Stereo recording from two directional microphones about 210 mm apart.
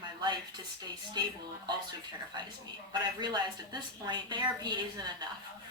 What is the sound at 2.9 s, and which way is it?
A woman's voice, 20° right (ahead or behind).